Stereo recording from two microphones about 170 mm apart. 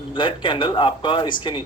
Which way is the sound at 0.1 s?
30° left (ahead or behind).